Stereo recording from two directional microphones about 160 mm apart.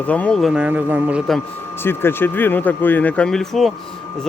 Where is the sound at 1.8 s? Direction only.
15° left (ahead or behind).